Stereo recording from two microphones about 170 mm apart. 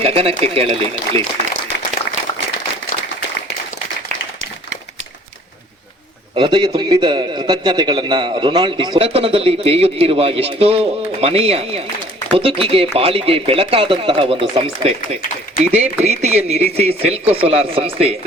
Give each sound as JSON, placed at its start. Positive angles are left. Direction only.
{"t": 0.0, "sound": "speech", "side_deg": -35}
{"t": 6.3, "sound": "a man's voice", "side_deg": -30}